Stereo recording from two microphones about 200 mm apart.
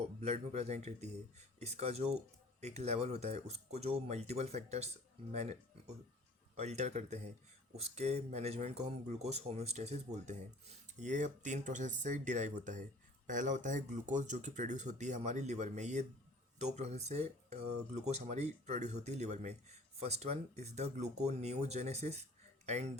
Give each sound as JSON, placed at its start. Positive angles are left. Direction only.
{"t": 0.2, "sound": "speech", "side_deg": -30}
{"t": 6.6, "sound": "speech", "side_deg": -35}